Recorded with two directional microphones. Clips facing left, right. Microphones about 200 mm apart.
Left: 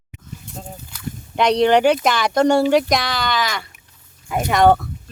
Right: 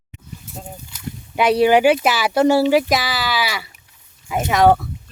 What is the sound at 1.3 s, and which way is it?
Speech, 5° right (ahead or behind).